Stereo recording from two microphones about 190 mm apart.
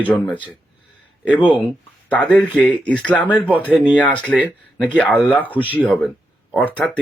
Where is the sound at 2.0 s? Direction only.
5° left (ahead or behind).